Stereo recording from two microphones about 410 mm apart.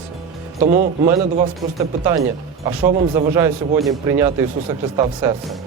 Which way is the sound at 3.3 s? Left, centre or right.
Centre.